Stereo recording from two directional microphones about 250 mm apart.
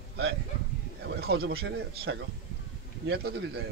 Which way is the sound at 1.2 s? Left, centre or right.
Right.